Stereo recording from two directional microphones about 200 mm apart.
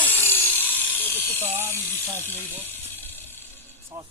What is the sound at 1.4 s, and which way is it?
Speech, 10° right (ahead or behind).